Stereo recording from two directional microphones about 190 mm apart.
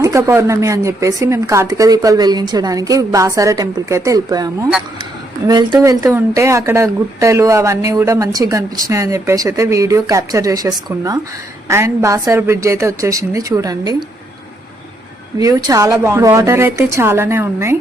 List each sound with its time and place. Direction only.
0.0 s a woman's voice: 15° right (ahead or behind)
15.4 s a woman's voice: 20° right (ahead or behind)